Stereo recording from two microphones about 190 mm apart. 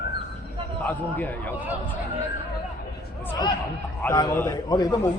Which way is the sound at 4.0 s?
15° left (ahead or behind).